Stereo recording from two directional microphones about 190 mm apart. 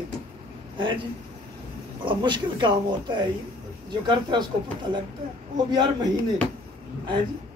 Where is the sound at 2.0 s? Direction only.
25° right (ahead or behind).